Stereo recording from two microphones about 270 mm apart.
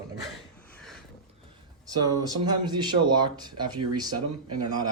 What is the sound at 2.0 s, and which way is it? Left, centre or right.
Speech, centre.